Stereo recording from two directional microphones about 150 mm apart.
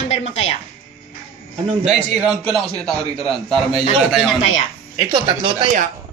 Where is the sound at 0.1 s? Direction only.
45° left (ahead or behind).